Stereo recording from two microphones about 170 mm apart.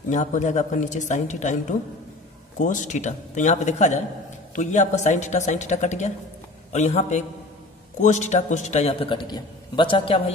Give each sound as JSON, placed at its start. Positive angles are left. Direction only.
{"t": 0.1, "sound": "a woman's voice", "side_deg": 45}